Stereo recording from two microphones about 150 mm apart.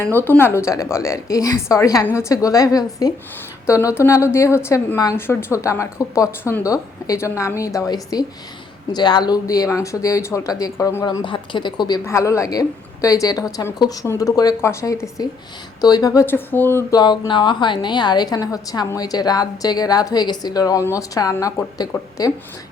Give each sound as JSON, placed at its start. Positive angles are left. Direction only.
{"t": 0.1, "sound": "a woman's voice", "side_deg": 15}
{"t": 12.0, "sound": "a woman's voice", "side_deg": 20}
{"t": 16.2, "sound": "a woman's voice", "side_deg": 15}
{"t": 16.9, "sound": "a woman's voice", "side_deg": 30}